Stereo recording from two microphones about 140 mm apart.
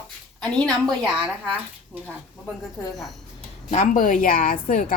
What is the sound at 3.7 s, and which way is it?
A woman's voice, 65° left (ahead or behind).